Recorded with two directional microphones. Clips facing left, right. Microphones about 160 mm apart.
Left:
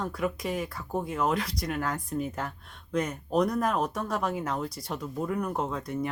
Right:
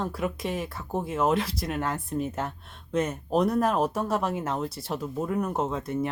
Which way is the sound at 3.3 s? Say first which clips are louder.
Right 2 dB; 30° right (ahead or behind).